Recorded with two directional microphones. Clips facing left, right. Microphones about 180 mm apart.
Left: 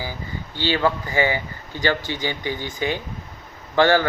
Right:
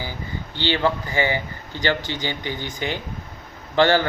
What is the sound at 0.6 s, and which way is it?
Speech, 20° right (ahead or behind).